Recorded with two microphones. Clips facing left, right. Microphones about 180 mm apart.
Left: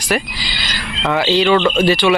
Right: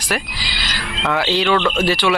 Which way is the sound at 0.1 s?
5° right (ahead or behind).